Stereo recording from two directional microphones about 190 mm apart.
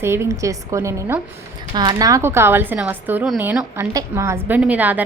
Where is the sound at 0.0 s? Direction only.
15° right (ahead or behind).